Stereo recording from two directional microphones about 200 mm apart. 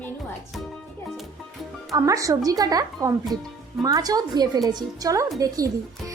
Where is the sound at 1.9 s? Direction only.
15° right (ahead or behind).